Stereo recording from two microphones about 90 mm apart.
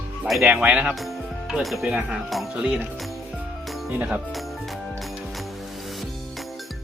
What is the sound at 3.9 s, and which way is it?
Speech, 15° right (ahead or behind).